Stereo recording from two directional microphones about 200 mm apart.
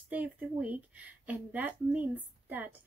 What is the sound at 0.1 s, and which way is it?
A woman's voice, 5° right (ahead or behind).